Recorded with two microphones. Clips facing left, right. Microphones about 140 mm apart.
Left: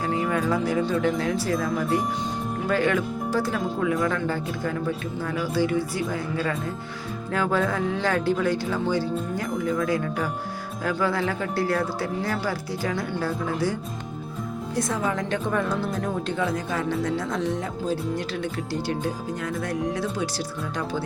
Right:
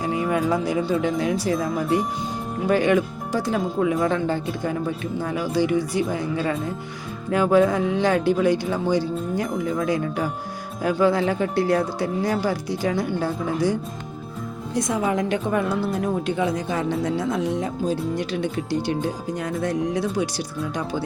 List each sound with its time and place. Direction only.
0.0 s music: 15° right (ahead or behind)
1.0 s speech: 15° right (ahead or behind)
2.6 s speech: 15° right (ahead or behind)
14.8 s speech: 15° right (ahead or behind)